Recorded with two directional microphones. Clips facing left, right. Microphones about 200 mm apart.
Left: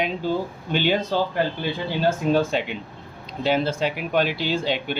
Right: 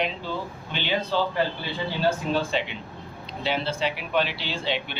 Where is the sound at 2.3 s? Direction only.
45° left (ahead or behind).